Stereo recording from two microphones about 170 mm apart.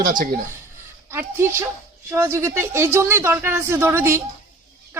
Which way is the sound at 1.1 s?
15° right (ahead or behind).